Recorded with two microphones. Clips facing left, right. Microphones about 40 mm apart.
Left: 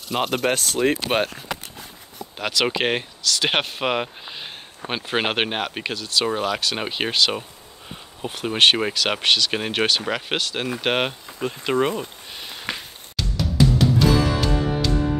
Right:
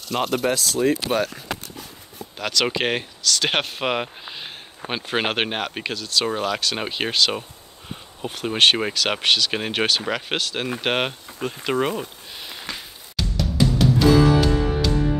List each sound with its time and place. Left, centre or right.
0.1 s speech: centre
0.5 s speech: left
2.3 s speech: centre
12.7 s music: left
13.1 s music: centre